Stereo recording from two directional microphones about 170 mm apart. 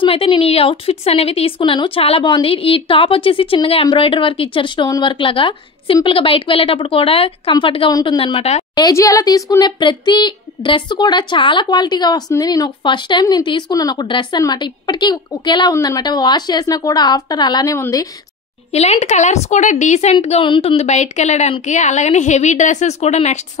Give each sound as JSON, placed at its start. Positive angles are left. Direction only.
{"t": 0.0, "sound": "speech", "side_deg": 30}
{"t": 8.7, "sound": "speech", "side_deg": 20}
{"t": 18.7, "sound": "a woman's voice", "side_deg": 40}